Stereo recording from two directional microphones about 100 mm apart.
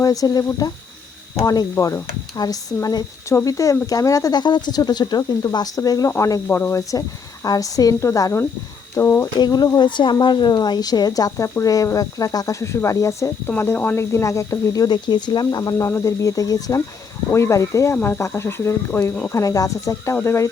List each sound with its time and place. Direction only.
0.0 s speech: 35° left (ahead or behind)
1.7 s speech: 30° left (ahead or behind)
7.4 s speech: 35° left (ahead or behind)
9.4 s speech: 40° left (ahead or behind)
13.5 s speech: 20° left (ahead or behind)
19.4 s speech: 35° left (ahead or behind)